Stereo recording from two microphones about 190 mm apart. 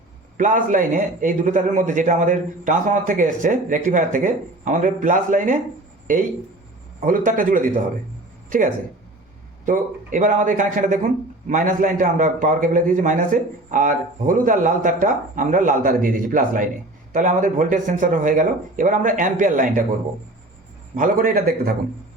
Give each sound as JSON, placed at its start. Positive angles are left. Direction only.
{"t": 0.3, "sound": "a man's voice", "side_deg": -45}
{"t": 7.0, "sound": "a man's voice", "side_deg": -45}
{"t": 20.9, "sound": "a man's voice", "side_deg": -45}